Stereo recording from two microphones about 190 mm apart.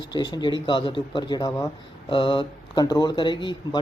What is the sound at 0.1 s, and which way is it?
Speech, 20° left (ahead or behind).